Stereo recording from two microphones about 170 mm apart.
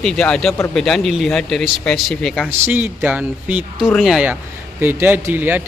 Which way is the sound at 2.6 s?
10° right (ahead or behind).